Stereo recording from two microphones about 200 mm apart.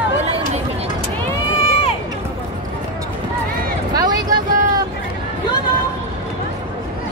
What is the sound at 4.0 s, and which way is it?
Vehicle, 20° right (ahead or behind).